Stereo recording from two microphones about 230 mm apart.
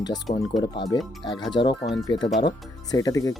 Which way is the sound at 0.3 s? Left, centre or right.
Left.